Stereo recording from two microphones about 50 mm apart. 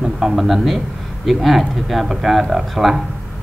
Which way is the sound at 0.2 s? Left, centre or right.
Centre.